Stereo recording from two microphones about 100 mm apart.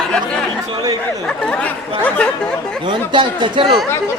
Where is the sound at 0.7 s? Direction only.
40° right (ahead or behind).